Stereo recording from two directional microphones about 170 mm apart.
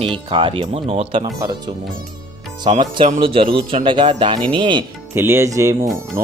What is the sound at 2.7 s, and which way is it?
Speech, 30° right (ahead or behind).